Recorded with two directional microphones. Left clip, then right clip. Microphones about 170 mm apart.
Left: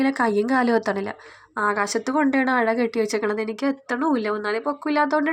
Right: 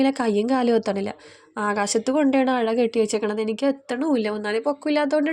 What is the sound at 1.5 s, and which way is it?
A woman's voice, 40° right (ahead or behind).